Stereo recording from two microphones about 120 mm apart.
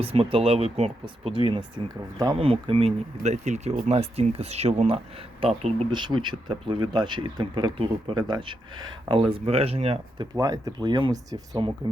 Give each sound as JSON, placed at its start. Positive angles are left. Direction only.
{"t": 0.0, "sound": "speech", "side_deg": -55}
{"t": 5.9, "sound": "speech", "side_deg": -40}
{"t": 10.3, "sound": "speech", "side_deg": -30}